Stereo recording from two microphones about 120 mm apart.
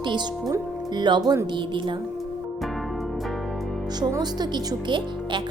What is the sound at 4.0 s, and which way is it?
Speech, 35° right (ahead or behind).